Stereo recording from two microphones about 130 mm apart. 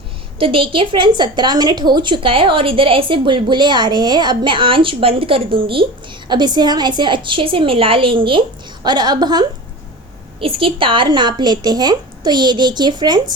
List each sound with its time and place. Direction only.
0.3 s a woman's voice: 45° right (ahead or behind)
10.4 s a woman's voice: 45° right (ahead or behind)